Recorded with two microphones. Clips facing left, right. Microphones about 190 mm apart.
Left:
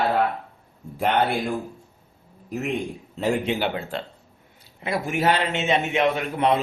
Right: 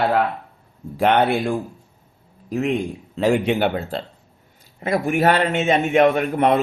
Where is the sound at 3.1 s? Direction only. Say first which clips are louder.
Right 5 dB; 90° right; by 3.8 s 55° right (ahead or behind).